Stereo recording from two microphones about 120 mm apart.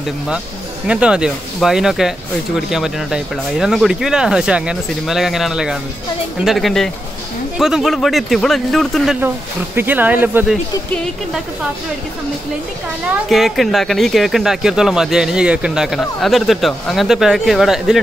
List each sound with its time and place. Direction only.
0.8 s speech: 10° right (ahead or behind)
9.8 s speech: 15° right (ahead or behind)
13.3 s speech: centre (ahead or behind)